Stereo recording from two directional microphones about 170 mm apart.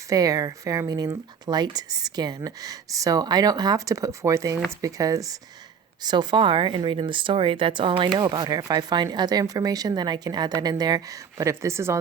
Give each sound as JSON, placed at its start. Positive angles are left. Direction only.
{"t": 0.1, "sound": "speech", "side_deg": -20}